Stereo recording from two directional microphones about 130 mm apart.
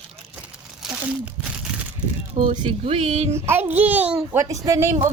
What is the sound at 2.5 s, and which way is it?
Speech, 45° right (ahead or behind).